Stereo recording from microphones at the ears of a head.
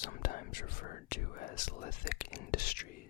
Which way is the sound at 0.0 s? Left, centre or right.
Left.